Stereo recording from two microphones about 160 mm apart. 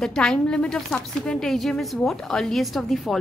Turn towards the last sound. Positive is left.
turn(degrees=0)  # may be behind; listen again after turning